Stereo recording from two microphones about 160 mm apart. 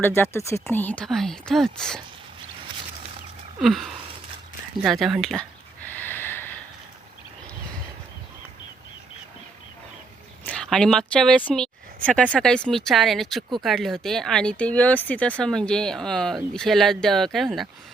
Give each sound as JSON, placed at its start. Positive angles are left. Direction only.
{"t": 0.0, "sound": "speech", "side_deg": 15}
{"t": 3.6, "sound": "speech", "side_deg": 0}
{"t": 4.8, "sound": "a sound", "side_deg": 0}
{"t": 10.4, "sound": "speech", "side_deg": 5}